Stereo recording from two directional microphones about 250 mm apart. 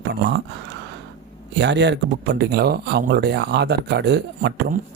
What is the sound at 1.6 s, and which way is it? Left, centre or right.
Speech, right.